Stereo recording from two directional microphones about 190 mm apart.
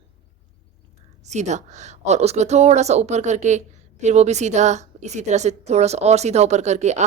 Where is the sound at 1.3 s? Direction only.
40° right (ahead or behind).